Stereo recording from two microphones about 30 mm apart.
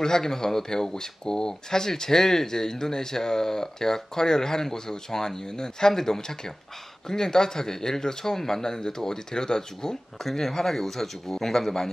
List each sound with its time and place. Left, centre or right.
0.0 s speech: centre